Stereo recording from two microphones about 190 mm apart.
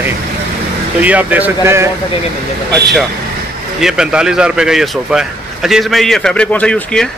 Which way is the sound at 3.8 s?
5° right (ahead or behind).